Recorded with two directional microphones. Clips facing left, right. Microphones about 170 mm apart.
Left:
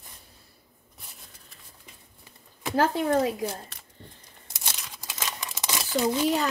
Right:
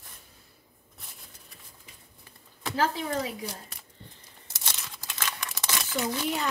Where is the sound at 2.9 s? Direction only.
45° left (ahead or behind).